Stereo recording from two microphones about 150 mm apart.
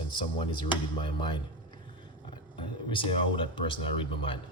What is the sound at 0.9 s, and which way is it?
Speech, 35° left (ahead or behind).